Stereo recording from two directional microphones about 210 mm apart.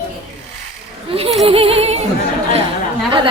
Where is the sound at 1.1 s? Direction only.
25° right (ahead or behind).